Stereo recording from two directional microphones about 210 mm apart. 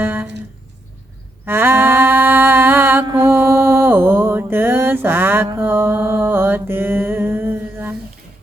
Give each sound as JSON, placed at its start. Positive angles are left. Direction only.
{"t": 0.0, "sound": "music", "side_deg": -10}
{"t": 1.5, "sound": "mantra", "side_deg": -10}